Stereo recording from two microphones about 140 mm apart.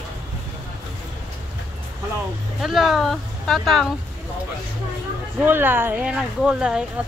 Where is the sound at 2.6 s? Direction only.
Centre (ahead or behind).